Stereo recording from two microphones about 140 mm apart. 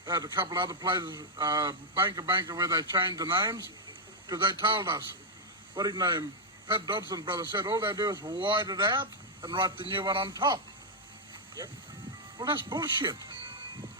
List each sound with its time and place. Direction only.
0.0 s a man's voice: 30° right (ahead or behind)
12.4 s speech: 35° right (ahead or behind)